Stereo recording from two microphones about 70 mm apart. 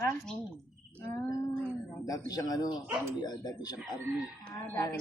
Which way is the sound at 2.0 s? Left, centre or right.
Left.